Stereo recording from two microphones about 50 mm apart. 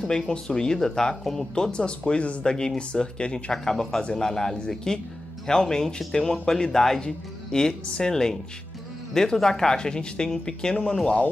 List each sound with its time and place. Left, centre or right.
0.0 s speech: centre
1.5 s speech: centre
3.5 s speech: centre